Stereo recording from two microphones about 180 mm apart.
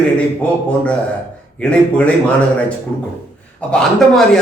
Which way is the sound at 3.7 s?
5° left (ahead or behind).